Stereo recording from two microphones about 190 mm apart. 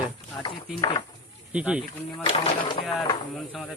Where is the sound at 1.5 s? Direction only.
5° right (ahead or behind).